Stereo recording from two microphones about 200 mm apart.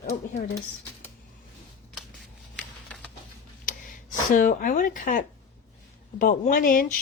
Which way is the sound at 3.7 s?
40° left (ahead or behind).